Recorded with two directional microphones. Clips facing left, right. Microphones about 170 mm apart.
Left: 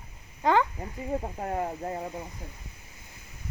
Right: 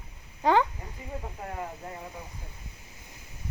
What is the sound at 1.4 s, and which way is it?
Speech, 35° left (ahead or behind).